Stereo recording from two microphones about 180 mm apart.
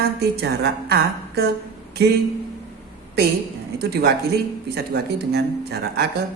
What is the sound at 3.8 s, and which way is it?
Speech, 65° right (ahead or behind).